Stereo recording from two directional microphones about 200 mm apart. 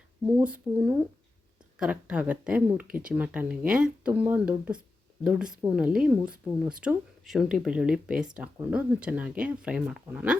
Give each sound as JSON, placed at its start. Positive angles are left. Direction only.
{"t": 0.4, "sound": "speech", "side_deg": -5}